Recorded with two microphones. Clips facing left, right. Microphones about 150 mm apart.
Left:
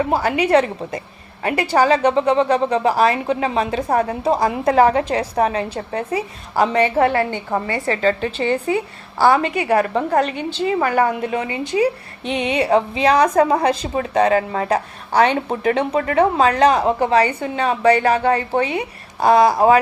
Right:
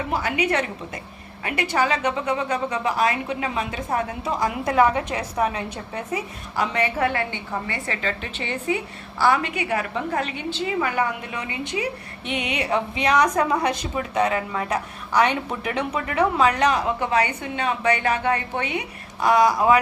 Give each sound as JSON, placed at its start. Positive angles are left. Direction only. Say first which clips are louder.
{"t": 0.1, "sound": "a woman's voice", "louder": "left 6 dB", "side_deg": 35}
{"t": 9.6, "sound": "a woman's voice", "louder": "left 8 dB", "side_deg": 45}
{"t": 11.4, "sound": "a woman's voice", "louder": "left 7 dB", "side_deg": 35}